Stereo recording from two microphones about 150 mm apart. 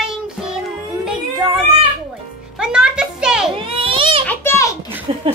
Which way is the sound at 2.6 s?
5° right (ahead or behind).